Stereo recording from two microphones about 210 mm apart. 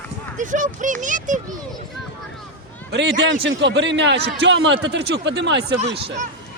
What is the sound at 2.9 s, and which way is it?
A man's voice, 55° right (ahead or behind).